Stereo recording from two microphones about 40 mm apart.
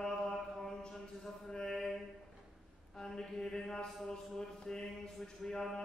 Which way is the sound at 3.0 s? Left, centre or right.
Centre.